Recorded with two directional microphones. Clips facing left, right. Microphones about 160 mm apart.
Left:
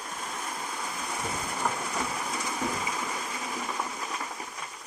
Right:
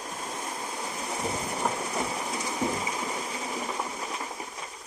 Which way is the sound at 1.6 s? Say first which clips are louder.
Right 1 dB; 20° right (ahead or behind).